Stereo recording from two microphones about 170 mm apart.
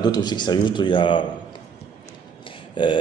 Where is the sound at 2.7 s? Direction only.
30° left (ahead or behind).